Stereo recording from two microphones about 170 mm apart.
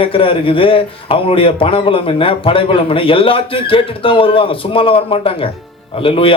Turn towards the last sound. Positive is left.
turn(degrees=30)  # may be behind; listen again after turning